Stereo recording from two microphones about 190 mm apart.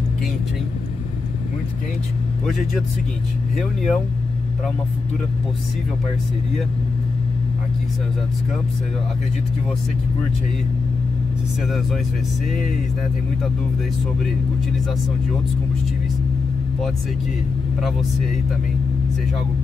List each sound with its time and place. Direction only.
3.5 s speech: centre (ahead or behind)